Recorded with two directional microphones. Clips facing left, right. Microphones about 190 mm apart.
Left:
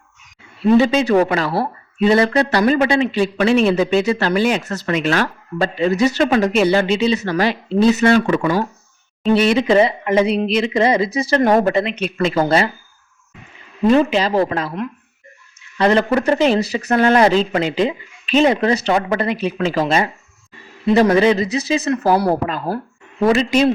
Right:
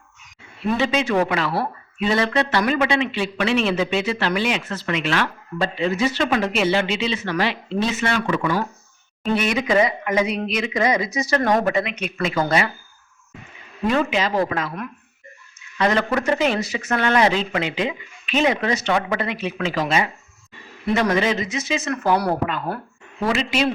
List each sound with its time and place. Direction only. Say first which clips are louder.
0.8 s speech: left 4 dB; 35° left (ahead or behind)
9.3 s speech: left 6 dB; 30° left (ahead or behind)
13.8 s speech: left 6 dB; 30° left (ahead or behind)
15.8 s speech: left 5 dB; 30° left (ahead or behind)